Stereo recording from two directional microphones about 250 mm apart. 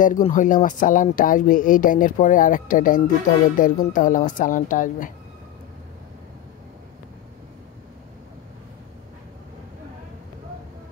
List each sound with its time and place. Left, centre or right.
0.0 s speech: left